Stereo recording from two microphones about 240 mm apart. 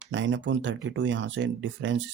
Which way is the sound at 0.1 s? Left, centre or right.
Right.